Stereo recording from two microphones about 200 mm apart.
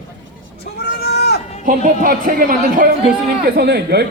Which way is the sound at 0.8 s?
50° left (ahead or behind).